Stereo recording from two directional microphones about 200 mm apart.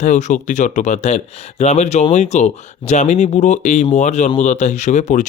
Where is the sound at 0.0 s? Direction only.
35° left (ahead or behind).